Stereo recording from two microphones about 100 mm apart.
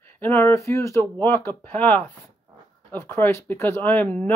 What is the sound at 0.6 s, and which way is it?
Speech, 30° left (ahead or behind).